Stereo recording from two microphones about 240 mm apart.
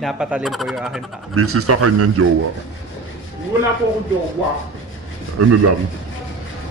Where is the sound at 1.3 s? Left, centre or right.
Right.